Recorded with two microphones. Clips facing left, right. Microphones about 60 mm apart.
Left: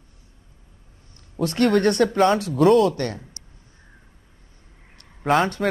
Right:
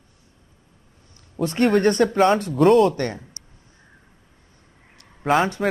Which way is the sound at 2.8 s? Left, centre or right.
Right.